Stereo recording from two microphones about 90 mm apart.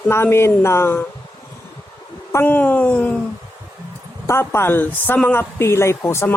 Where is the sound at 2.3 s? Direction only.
20° left (ahead or behind).